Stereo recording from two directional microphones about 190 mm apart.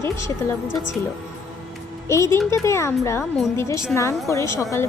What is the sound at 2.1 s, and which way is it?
Speech, 15° left (ahead or behind).